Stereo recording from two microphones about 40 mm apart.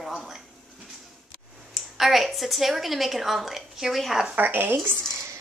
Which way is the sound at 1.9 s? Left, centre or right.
Centre.